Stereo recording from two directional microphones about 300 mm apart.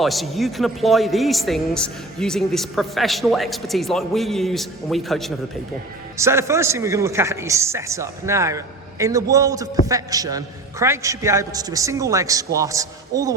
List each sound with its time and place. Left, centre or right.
0.0 s a man's voice: centre